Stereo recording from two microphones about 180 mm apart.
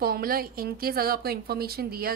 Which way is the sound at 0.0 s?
55° right (ahead or behind).